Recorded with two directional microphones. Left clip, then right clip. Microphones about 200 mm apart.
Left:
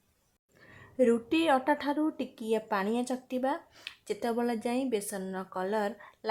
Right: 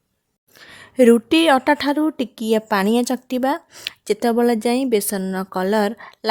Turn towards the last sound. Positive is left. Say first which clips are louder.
# right 12 dB
turn(degrees=-40)  # may be behind; listen again after turning